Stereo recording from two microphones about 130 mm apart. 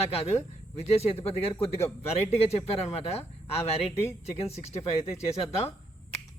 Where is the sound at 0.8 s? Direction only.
50° left (ahead or behind).